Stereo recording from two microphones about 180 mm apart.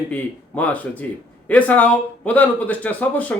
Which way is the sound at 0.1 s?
10° left (ahead or behind).